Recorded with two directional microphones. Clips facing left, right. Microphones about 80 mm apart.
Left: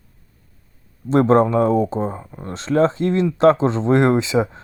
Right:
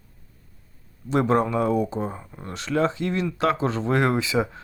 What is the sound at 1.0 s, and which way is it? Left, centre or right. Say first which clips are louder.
Speech: left 7 dB; left.